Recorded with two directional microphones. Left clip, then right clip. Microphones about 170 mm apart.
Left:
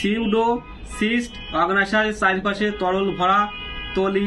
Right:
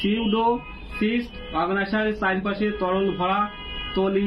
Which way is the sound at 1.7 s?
15° left (ahead or behind).